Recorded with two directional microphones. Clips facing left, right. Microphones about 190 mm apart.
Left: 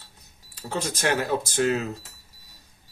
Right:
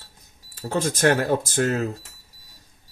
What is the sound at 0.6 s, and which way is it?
Speech, 50° right (ahead or behind).